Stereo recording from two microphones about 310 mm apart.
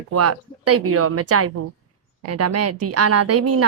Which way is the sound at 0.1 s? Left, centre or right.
Right.